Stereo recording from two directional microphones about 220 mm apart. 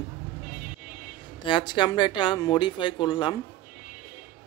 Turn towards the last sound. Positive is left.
turn(degrees=20)  # may be behind; listen again after turning